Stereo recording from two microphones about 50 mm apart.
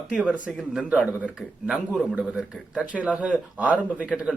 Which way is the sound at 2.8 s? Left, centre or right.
Right.